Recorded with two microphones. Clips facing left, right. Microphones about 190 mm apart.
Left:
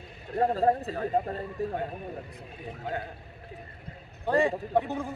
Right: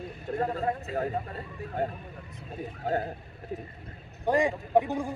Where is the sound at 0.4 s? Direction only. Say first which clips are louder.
Left 6 dB; 35° left (ahead or behind).